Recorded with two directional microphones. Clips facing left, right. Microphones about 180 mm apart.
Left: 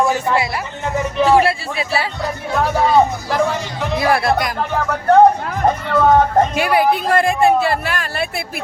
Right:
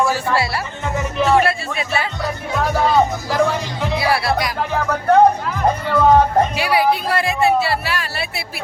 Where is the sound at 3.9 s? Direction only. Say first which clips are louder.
Left 3 dB; 50° left (ahead or behind).